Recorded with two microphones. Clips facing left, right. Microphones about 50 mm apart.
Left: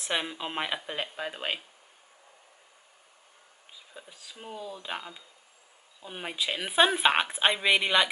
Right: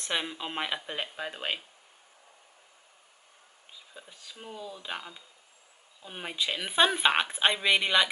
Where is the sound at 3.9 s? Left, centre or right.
Centre.